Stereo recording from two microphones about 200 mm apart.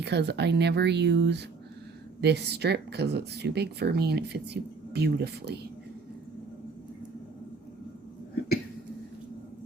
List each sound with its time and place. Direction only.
0.0 s speech: 55° right (ahead or behind)